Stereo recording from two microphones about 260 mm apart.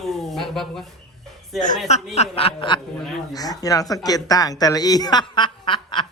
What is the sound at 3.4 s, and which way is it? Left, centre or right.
Speech, centre.